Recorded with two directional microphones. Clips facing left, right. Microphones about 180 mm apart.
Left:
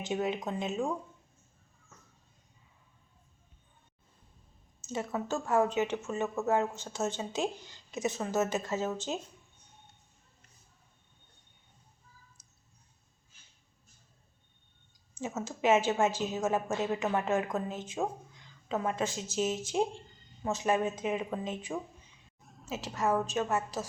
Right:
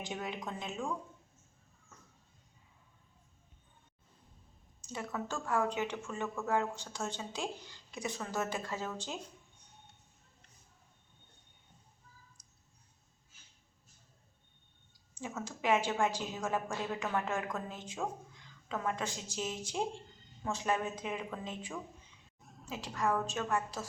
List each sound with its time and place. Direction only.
0.0 s a woman's voice: 20° left (ahead or behind)
4.8 s a woman's voice: 25° left (ahead or behind)
12.4 s a sound: 5° left (ahead or behind)
15.2 s a woman's voice: 25° left (ahead or behind)
22.4 s a sound: centre (ahead or behind)
22.7 s a woman's voice: 20° left (ahead or behind)